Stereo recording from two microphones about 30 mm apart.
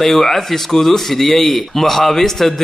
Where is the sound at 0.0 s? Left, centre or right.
Centre.